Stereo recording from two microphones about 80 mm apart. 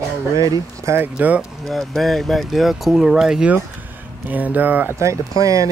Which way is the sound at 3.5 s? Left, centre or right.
Right.